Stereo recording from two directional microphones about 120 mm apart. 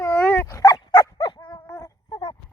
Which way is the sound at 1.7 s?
25° left (ahead or behind).